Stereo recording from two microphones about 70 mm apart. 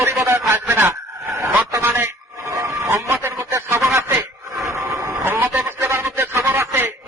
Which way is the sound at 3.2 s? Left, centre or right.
Right.